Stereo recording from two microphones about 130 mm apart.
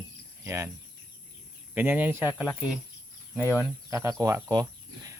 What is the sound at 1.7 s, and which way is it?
Speech, 15° right (ahead or behind).